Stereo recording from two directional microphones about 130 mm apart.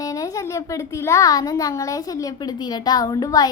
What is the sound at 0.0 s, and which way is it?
A woman's voice, 25° left (ahead or behind).